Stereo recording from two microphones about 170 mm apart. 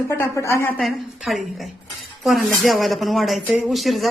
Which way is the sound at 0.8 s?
Centre (ahead or behind).